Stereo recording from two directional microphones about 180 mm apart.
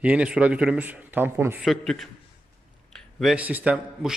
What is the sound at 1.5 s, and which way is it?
A man's voice, centre (ahead or behind).